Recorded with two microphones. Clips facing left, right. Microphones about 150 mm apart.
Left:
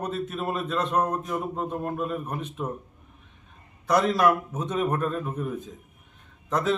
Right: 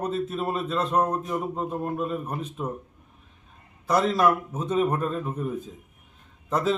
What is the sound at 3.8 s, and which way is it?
Speech, centre (ahead or behind).